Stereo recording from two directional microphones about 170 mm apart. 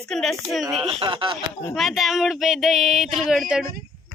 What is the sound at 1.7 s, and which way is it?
Speech, centre (ahead or behind).